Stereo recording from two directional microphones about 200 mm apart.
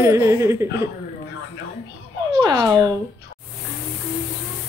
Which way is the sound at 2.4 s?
20° right (ahead or behind).